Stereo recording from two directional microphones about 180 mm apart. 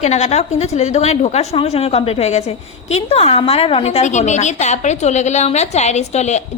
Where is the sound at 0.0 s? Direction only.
40° left (ahead or behind).